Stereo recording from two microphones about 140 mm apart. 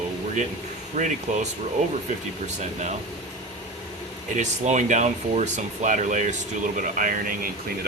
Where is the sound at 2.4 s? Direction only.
55° right (ahead or behind).